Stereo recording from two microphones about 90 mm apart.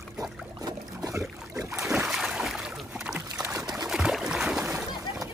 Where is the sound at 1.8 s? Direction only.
5° right (ahead or behind).